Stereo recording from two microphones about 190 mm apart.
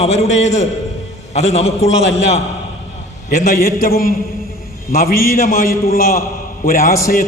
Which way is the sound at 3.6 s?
50° left (ahead or behind).